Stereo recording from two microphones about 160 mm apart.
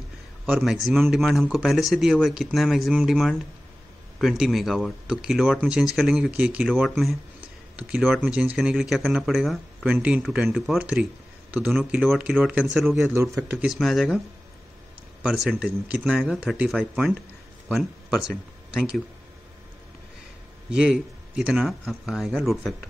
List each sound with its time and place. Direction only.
0.5 s speech: 5° right (ahead or behind)
13.1 s speech: 15° right (ahead or behind); by 14.2 s centre (ahead or behind)
15.2 s speech: 5° right (ahead or behind)
20.7 s speech: 5° right (ahead or behind)